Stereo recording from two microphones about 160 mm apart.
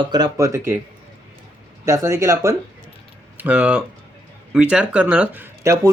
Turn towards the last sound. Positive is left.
turn(degrees=-20)  # may be behind; listen again after turning